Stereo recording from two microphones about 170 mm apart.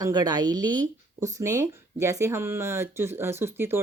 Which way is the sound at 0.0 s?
25° right (ahead or behind).